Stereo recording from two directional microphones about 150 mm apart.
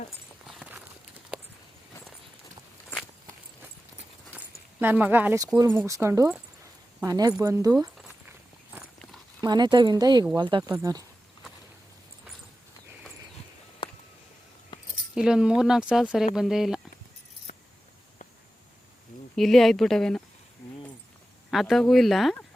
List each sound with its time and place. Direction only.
0.4 s a sound: 5° right (ahead or behind)
4.3 s a sound: 10° right (ahead or behind)
5.7 s speech: 20° right (ahead or behind)
9.4 s speech: 30° right (ahead or behind)
14.7 s keys jangling: 30° left (ahead or behind)
15.1 s speech: 5° right (ahead or behind)
19.4 s speech: centre (ahead or behind)
21.5 s speech: centre (ahead or behind)